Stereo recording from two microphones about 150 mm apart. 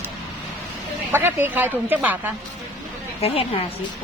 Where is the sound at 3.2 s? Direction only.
40° left (ahead or behind).